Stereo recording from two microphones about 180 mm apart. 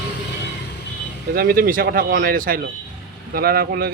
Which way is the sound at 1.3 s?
55° right (ahead or behind).